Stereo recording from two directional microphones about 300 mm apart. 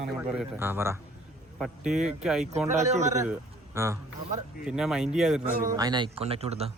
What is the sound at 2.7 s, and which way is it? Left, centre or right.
Speech, right.